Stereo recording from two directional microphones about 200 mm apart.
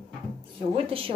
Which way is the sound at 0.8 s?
25° right (ahead or behind).